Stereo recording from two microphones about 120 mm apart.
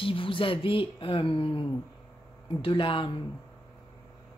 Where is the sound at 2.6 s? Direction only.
45° left (ahead or behind).